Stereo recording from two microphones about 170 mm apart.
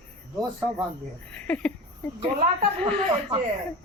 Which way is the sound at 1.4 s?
10° left (ahead or behind).